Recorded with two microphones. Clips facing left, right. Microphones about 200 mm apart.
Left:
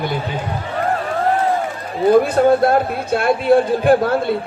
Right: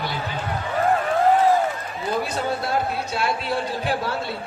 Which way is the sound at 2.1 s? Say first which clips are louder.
Left 13 dB; 55° left (ahead or behind).